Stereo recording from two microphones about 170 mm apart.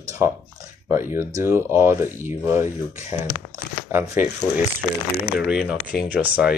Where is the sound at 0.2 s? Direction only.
20° right (ahead or behind).